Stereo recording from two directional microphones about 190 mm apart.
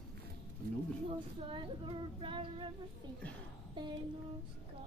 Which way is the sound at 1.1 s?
25° right (ahead or behind).